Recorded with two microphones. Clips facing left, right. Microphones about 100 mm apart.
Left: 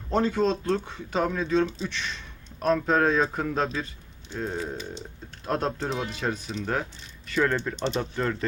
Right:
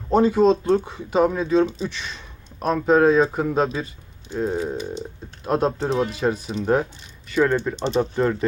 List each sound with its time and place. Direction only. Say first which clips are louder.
0.1 s speech: right 7 dB; 15° right (ahead or behind)